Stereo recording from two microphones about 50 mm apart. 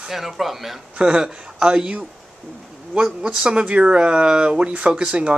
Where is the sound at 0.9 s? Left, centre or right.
Centre.